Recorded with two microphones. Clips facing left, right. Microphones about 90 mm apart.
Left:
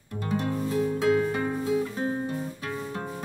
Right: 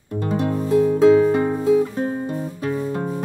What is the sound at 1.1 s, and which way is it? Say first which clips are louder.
Music: right 9 dB; 35° right (ahead or behind).